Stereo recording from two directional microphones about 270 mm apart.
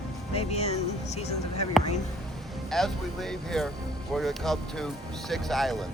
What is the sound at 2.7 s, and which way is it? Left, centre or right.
Speech, centre.